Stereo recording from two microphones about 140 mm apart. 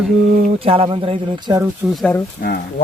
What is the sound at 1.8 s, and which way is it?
Speech, centre (ahead or behind).